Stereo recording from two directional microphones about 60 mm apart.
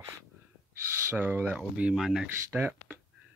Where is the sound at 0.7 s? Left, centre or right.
Right.